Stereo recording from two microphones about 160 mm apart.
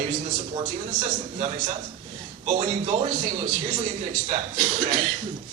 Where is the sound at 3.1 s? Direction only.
60° right (ahead or behind).